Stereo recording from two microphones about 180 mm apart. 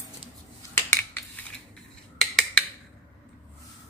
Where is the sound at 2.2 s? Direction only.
5° left (ahead or behind).